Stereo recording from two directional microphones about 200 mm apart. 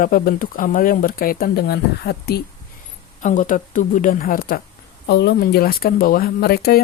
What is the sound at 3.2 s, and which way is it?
Speech, 40° left (ahead or behind).